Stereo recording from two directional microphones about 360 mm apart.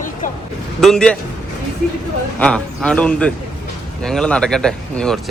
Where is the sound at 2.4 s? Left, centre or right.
Centre.